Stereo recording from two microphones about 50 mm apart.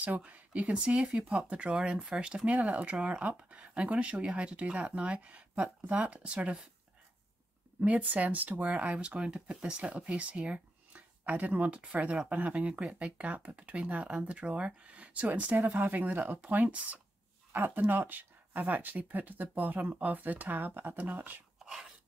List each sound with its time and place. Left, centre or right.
0.0 s speech: right
1.0 s speech: centre
1.5 s speech: right
7.8 s speech: right